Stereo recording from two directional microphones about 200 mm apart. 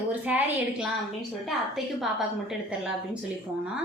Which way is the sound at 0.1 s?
5° right (ahead or behind).